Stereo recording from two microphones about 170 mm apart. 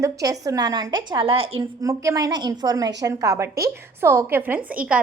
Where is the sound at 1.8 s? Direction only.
20° right (ahead or behind).